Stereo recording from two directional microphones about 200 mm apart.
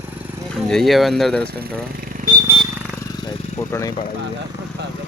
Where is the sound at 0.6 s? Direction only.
Centre (ahead or behind).